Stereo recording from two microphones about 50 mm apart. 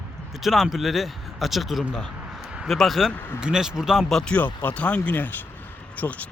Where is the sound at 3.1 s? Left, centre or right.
Left.